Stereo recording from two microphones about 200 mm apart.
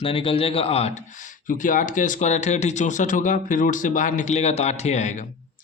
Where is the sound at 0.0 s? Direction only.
25° left (ahead or behind).